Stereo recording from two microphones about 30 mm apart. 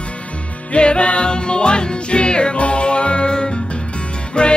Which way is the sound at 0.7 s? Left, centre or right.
Left.